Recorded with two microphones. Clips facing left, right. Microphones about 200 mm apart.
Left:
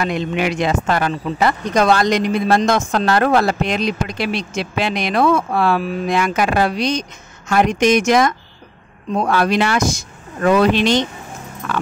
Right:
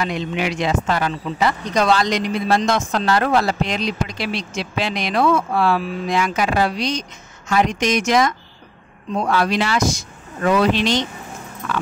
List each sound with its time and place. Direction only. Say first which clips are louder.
0.0 s speech: left 3 dB; 55° left (ahead or behind)